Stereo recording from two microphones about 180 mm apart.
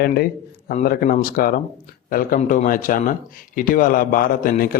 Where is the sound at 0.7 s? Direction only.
45° left (ahead or behind).